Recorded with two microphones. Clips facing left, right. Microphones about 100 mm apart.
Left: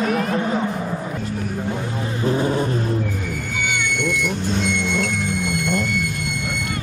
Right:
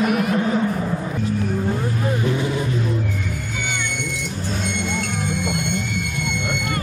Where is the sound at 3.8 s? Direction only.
55° left (ahead or behind).